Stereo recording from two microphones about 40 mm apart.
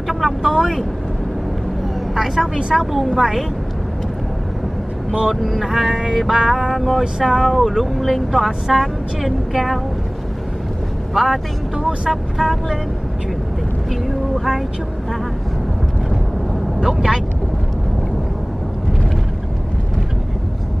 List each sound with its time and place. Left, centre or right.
0.4 s speech: centre
2.1 s speech: centre
5.6 s vehicle: centre
6.1 s speech: centre
7.2 s vehicle: centre
7.4 s speech: centre
11.1 s speech: centre
11.7 s speech: centre
12.1 s speech: centre
14.0 s vehicle: centre
16.8 s vehicle: centre